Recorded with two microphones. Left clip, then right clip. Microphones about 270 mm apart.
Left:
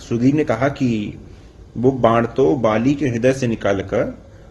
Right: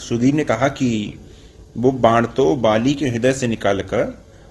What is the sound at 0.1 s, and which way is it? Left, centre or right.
Speech, right.